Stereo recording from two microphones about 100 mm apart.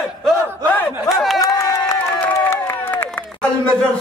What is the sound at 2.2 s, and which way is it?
Crowd, 20° left (ahead or behind).